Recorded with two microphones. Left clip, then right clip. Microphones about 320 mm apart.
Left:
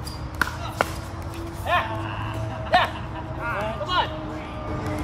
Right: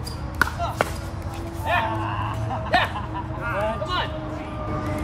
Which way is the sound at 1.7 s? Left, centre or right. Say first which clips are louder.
Even; centre.